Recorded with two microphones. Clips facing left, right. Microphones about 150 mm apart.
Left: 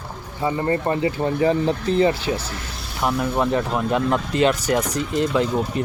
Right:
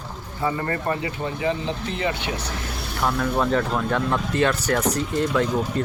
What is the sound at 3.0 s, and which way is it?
Speech, 15° left (ahead or behind).